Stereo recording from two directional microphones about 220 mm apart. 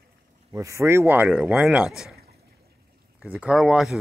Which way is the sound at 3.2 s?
5° right (ahead or behind).